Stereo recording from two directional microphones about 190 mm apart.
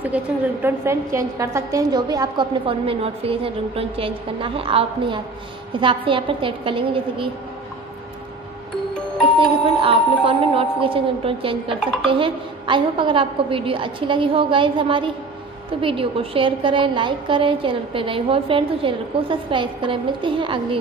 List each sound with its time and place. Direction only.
0.0 s a woman's voice: 10° right (ahead or behind); by 7.2 s 30° right (ahead or behind)
9.4 s a woman's voice: 30° right (ahead or behind)